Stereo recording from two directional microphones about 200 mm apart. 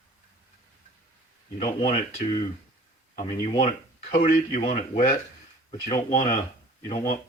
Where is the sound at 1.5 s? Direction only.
30° left (ahead or behind).